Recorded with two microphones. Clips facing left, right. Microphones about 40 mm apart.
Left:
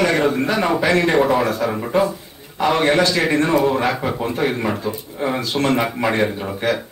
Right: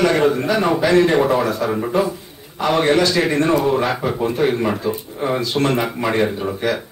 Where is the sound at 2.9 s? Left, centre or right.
Left.